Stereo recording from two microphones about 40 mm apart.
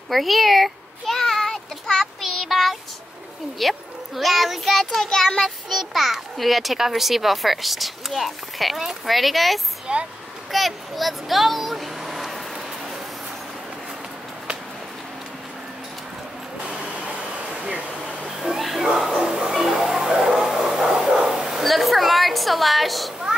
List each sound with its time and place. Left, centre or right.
0.1 s a sound: centre
2.2 s child singing: centre
3.5 s a child's voice: centre
5.0 s child singing: centre
5.4 s a child's voice: centre
9.9 s speech: right
10.5 s vehicle: centre
16.6 s a sound: right
18.3 s a sound: centre
20.6 s bow-wow: centre
21.6 s a woman's voice: centre